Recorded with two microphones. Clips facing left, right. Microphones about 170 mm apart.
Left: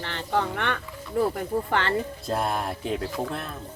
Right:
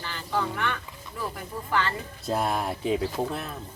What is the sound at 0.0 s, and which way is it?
A woman's voice, 65° left (ahead or behind).